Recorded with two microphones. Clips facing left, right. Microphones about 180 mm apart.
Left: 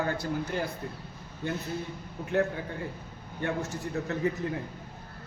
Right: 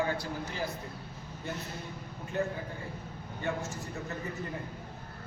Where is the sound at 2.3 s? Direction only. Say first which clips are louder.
Left 6 dB; 85° left.